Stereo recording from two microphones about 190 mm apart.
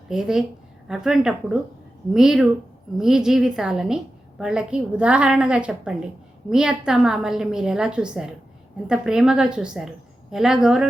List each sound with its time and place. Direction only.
0.1 s a woman's voice: 5° right (ahead or behind)